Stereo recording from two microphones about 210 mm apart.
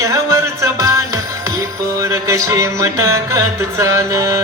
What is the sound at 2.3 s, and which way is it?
Music, 15° right (ahead or behind).